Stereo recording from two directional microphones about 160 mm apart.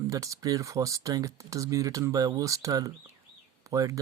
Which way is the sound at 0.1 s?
20° right (ahead or behind).